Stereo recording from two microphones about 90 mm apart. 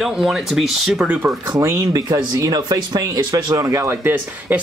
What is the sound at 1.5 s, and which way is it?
Speech, 40° right (ahead or behind).